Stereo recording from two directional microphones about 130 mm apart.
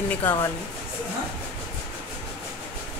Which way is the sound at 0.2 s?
15° left (ahead or behind).